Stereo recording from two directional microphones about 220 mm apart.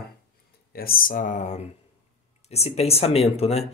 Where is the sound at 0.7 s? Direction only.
40° left (ahead or behind).